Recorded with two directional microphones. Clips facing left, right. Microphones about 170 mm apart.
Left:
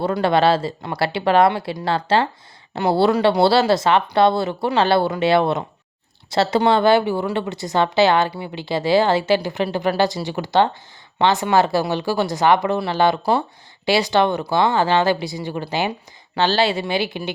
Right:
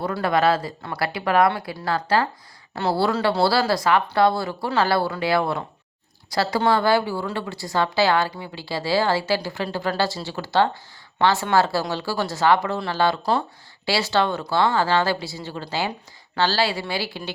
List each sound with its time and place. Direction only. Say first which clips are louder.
0.0 s speech: left 4 dB; 25° left (ahead or behind)